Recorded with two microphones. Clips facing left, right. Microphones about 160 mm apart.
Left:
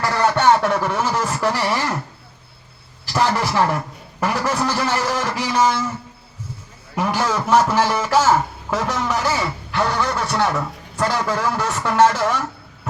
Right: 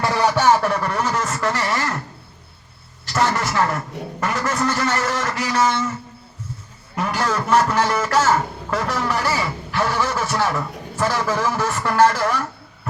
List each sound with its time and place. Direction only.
0.0 s a sound: 15° right (ahead or behind)
0.3 s a man's voice: 5° right (ahead or behind)
3.1 s vehicle: centre (ahead or behind)
4.2 s a man's voice: 10° left (ahead or behind)
6.9 s speech: 5° left (ahead or behind)